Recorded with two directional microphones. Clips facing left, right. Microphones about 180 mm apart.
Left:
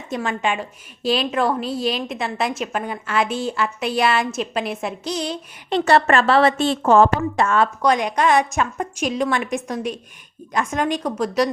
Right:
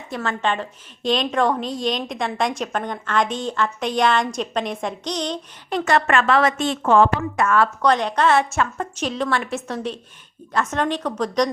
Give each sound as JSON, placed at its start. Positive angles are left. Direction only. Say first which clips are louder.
{"t": 0.1, "sound": "a woman's voice", "louder": "left 1 dB", "side_deg": 15}
{"t": 5.7, "sound": "a woman's voice", "louder": "left 3 dB", "side_deg": 35}
{"t": 7.4, "sound": "a woman's voice", "louder": "right 1 dB", "side_deg": 25}
{"t": 7.8, "sound": "a woman's voice", "louder": "even", "side_deg": 10}